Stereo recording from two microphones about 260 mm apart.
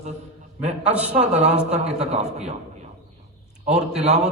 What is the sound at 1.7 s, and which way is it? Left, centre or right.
Speech, right.